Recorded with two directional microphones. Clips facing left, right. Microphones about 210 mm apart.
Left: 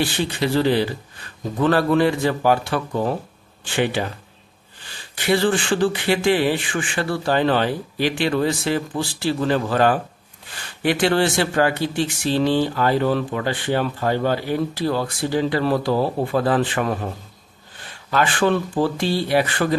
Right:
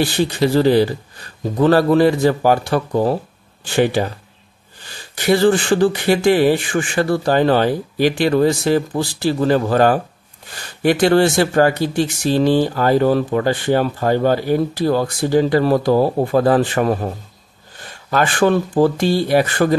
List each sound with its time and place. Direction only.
0.0 s speech: 40° right (ahead or behind)
18.1 s speech: 45° right (ahead or behind)